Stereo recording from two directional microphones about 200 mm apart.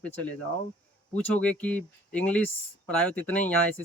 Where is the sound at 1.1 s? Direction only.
5° left (ahead or behind).